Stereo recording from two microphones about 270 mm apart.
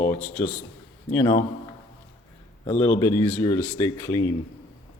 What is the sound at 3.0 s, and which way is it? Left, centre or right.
Speech, centre.